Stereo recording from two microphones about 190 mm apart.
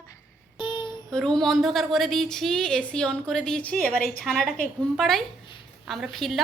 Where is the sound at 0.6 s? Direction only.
25° left (ahead or behind).